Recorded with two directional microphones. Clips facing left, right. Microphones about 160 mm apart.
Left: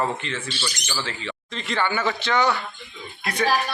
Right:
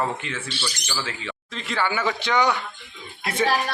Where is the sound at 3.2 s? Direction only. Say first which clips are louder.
Right 1 dB; 25° right (ahead or behind).